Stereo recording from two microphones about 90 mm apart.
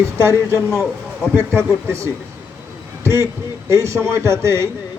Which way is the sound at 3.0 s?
30° right (ahead or behind).